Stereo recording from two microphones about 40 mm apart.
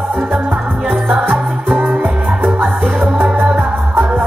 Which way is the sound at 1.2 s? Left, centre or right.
Right.